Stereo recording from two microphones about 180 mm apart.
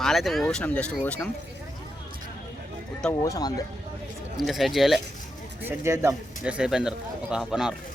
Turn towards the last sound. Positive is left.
turn(degrees=-5)  # may be behind; listen again after turning